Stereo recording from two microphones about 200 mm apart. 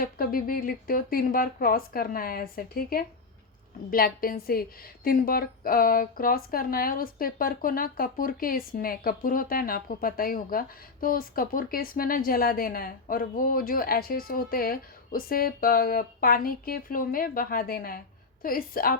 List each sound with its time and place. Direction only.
0.0 s a woman's voice: 45° left (ahead or behind)